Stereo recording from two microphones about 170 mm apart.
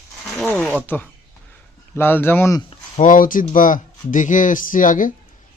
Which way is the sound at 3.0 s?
50° left (ahead or behind).